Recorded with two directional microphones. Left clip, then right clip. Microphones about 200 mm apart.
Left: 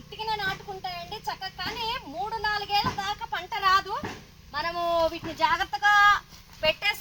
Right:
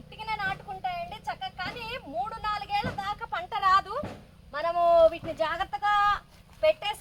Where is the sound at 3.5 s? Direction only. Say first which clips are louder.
Even; 20° right (ahead or behind).